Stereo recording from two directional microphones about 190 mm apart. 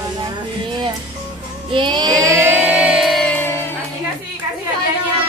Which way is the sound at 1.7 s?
25° right (ahead or behind).